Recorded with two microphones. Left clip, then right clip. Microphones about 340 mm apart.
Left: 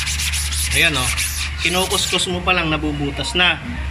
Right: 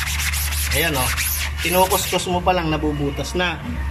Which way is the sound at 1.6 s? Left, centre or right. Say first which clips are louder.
Right 1 dB; right.